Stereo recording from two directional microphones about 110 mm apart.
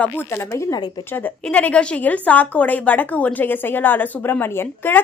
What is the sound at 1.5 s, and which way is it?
A woman's voice, 15° left (ahead or behind).